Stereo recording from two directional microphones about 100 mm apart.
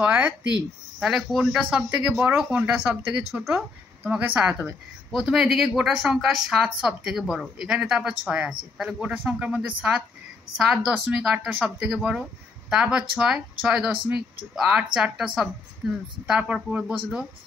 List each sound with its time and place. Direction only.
0.0 s a woman's voice: 15° right (ahead or behind)